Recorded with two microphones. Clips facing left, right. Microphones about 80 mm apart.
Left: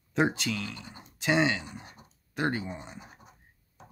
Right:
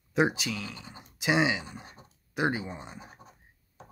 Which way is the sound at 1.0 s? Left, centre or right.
Centre.